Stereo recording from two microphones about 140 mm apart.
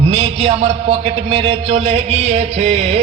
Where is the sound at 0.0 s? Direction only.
45° right (ahead or behind).